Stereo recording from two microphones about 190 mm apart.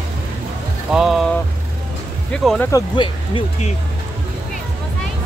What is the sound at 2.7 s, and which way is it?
Speech, 25° left (ahead or behind).